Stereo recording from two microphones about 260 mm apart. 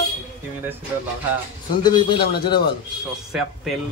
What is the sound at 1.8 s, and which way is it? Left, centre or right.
Speech, centre.